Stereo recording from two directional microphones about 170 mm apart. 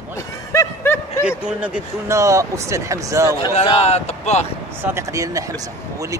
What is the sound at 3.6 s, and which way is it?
Speech, 35° left (ahead or behind).